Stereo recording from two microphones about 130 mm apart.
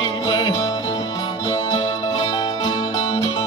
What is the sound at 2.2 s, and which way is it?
Music, 35° left (ahead or behind).